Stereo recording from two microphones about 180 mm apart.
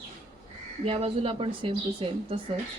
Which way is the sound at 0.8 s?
30° right (ahead or behind).